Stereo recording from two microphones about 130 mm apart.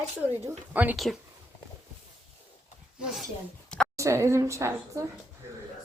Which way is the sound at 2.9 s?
Centre (ahead or behind).